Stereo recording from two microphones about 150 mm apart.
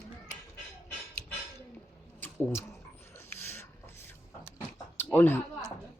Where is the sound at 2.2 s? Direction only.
15° left (ahead or behind).